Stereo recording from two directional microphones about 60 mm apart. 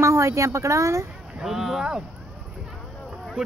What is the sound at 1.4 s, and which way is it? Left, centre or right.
Speech, centre.